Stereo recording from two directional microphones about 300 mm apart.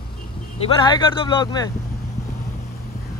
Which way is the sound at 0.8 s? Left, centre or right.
Centre.